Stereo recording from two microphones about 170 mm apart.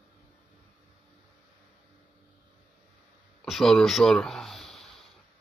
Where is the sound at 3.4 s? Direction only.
Centre (ahead or behind).